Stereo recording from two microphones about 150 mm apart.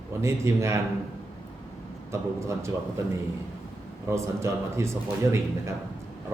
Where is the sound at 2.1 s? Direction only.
20° right (ahead or behind).